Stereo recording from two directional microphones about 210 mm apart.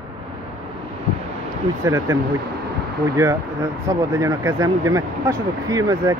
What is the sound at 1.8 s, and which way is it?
Speech, 15° right (ahead or behind).